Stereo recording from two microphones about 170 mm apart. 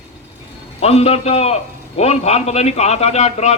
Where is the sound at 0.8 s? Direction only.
35° left (ahead or behind).